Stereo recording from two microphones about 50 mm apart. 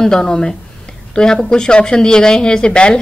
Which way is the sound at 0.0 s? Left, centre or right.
Centre.